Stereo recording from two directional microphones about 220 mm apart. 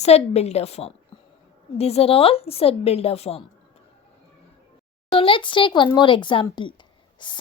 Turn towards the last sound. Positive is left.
turn(degrees=20)  # may be behind; listen again after turning